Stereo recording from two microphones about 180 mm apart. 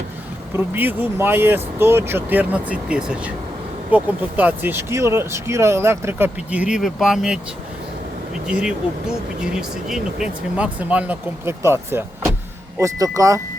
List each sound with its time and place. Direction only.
0.5 s speech: 10° right (ahead or behind)
8.4 s speech: 5° right (ahead or behind)